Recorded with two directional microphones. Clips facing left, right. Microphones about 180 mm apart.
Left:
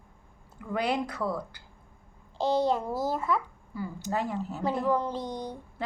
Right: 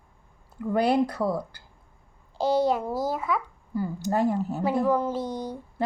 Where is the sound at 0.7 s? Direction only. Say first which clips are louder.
Right 6 dB; 35° right (ahead or behind).